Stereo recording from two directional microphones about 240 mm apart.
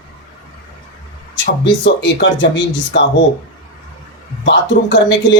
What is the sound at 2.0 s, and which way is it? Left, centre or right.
Speech, left.